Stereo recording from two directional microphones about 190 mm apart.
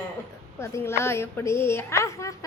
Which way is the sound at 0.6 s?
15° left (ahead or behind).